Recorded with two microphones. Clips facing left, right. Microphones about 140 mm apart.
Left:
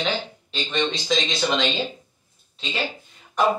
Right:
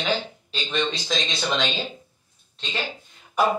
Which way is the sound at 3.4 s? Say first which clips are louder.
Left 1 dB; 10° right (ahead or behind).